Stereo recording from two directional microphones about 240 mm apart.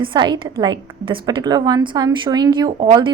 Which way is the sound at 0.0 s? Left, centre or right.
Centre.